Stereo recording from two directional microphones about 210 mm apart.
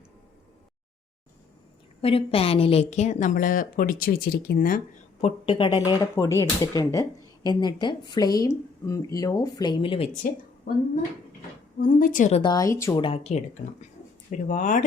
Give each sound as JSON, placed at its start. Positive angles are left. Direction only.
{"t": 2.0, "sound": "a woman's voice", "side_deg": 25}
{"t": 5.2, "sound": "speech", "side_deg": 25}
{"t": 10.7, "sound": "a woman's voice", "side_deg": 45}
{"t": 12.4, "sound": "speech", "side_deg": 20}
{"t": 13.0, "sound": "a woman's voice", "side_deg": 25}